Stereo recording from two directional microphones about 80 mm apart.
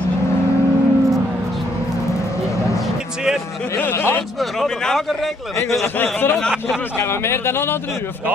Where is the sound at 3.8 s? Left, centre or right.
Left.